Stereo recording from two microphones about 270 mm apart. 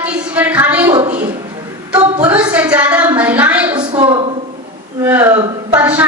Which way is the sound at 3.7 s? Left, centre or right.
Centre.